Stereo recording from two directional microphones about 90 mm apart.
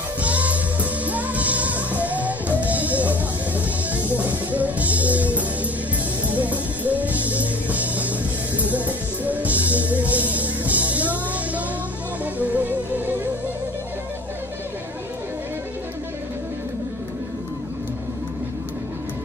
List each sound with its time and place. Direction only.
0.2 s music: 15° right (ahead or behind)